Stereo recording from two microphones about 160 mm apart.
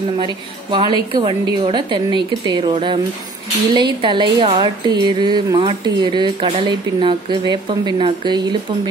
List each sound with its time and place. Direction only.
0.2 s a woman's voice: 30° right (ahead or behind)